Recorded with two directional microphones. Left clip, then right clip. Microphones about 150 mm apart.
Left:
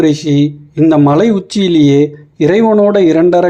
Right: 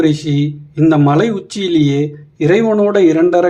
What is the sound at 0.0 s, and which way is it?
Speech, 20° left (ahead or behind).